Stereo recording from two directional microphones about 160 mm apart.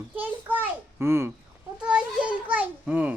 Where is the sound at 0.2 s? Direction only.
10° right (ahead or behind).